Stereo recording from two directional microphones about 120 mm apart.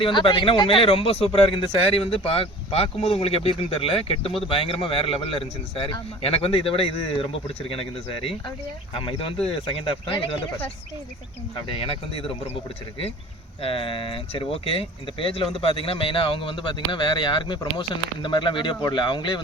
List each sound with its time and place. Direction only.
0.0 s speech: 45° left (ahead or behind)
11.7 s speech: 50° left (ahead or behind)
13.6 s speech: 50° left (ahead or behind)